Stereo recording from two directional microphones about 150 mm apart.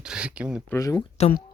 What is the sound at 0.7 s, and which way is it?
Speech, 25° left (ahead or behind).